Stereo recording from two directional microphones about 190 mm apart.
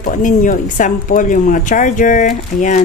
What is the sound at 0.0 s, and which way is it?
Speech, 45° left (ahead or behind).